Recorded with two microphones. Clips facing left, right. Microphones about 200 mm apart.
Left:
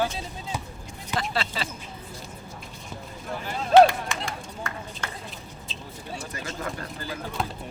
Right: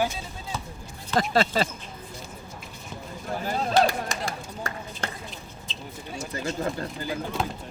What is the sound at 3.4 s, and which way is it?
Run, 40° right (ahead or behind).